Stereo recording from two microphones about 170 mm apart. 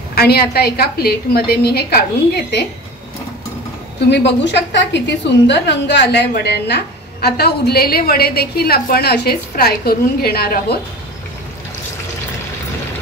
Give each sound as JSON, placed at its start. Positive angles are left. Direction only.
{"t": 0.1, "sound": "a woman's voice", "side_deg": 65}
{"t": 4.1, "sound": "a woman's voice", "side_deg": 90}